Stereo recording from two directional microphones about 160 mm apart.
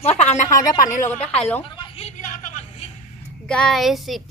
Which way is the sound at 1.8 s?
40° left (ahead or behind).